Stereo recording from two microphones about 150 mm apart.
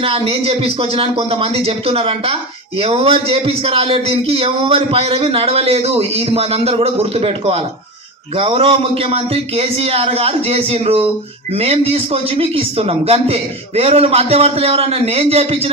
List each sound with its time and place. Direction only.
0.0 s a man's voice: 40° right (ahead or behind)